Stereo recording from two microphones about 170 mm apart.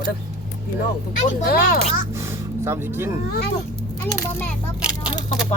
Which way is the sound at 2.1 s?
15° right (ahead or behind).